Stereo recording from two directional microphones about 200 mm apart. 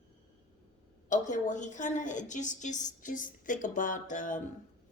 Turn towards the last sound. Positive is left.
turn(degrees=40)  # may be behind; listen again after turning